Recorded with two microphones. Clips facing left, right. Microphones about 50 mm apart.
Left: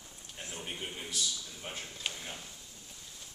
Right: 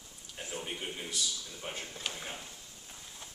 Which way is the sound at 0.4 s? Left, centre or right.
Centre.